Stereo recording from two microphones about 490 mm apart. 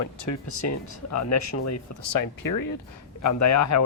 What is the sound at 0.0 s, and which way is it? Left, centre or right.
Speech, left.